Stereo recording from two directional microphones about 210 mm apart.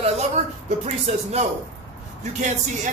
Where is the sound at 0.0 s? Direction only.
30° right (ahead or behind).